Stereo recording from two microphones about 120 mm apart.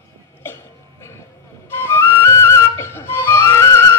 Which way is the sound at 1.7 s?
20° left (ahead or behind).